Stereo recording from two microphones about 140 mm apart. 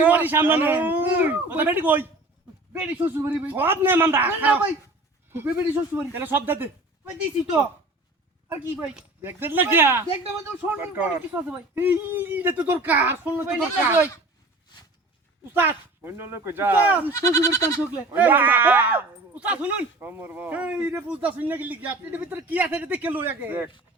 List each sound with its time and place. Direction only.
0.0 s speech: 15° right (ahead or behind)
5.9 s speech: 15° right (ahead or behind)
8.4 s speech: 10° right (ahead or behind)
15.5 s speech: 15° right (ahead or behind)
17.1 s speech: 20° left (ahead or behind)
18.1 s speech: 15° right (ahead or behind)